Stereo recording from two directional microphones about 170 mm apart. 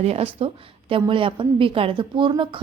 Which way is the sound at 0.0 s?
35° right (ahead or behind).